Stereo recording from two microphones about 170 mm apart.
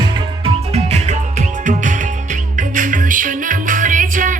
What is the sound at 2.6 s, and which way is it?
Music, 50° right (ahead or behind).